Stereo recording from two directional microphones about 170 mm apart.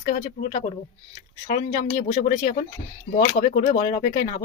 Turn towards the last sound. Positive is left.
turn(degrees=55)  # may be behind; listen again after turning